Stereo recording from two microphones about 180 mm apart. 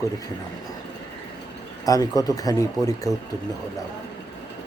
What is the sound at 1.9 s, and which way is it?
Speech, 20° left (ahead or behind).